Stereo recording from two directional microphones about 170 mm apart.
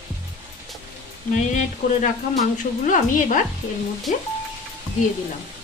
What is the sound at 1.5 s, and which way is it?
A woman's voice, 45° left (ahead or behind).